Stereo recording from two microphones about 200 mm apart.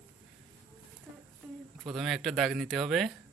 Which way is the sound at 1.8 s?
Centre (ahead or behind).